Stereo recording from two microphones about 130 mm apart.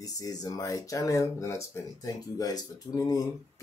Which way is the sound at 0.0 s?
30° left (ahead or behind).